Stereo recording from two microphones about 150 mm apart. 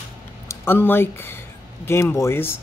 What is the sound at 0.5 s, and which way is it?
Speech, 15° left (ahead or behind).